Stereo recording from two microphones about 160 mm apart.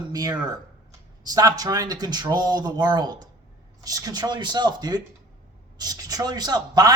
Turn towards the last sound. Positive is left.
turn(degrees=-25)  # may be behind; listen again after turning